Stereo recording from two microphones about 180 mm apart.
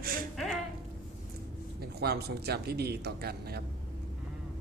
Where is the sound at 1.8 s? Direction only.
60° right (ahead or behind).